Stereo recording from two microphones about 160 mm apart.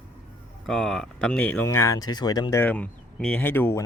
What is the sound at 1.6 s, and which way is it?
Speech, 20° left (ahead or behind).